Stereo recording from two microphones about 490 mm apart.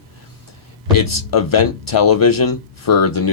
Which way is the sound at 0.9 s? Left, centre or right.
Left.